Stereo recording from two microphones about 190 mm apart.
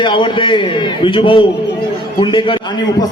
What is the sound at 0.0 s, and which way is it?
A man's voice, 25° left (ahead or behind).